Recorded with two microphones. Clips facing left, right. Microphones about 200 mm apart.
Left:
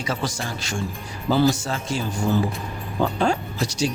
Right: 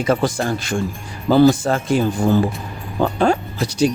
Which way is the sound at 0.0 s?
55° right (ahead or behind).